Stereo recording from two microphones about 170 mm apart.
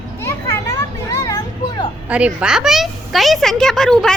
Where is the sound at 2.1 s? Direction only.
5° right (ahead or behind).